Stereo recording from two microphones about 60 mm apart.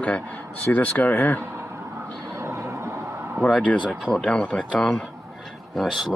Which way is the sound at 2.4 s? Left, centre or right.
Right.